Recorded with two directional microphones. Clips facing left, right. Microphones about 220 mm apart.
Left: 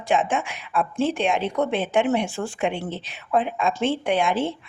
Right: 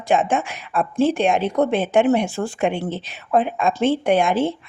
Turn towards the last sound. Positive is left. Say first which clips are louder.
# right 4 dB
turn(degrees=-45)  # may be behind; listen again after turning